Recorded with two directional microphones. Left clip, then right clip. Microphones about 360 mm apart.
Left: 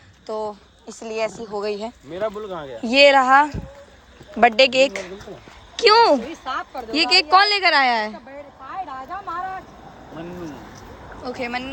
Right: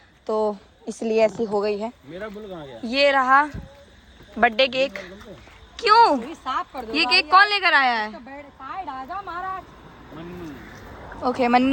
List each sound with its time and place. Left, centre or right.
0.9 s a woman's voice: centre
6.3 s a woman's voice: right
6.9 s a woman's voice: centre
8.6 s a sound: right
11.2 s speech: centre